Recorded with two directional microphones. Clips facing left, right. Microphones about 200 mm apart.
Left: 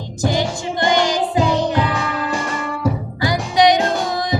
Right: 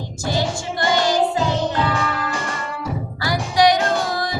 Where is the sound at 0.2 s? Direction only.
15° left (ahead or behind).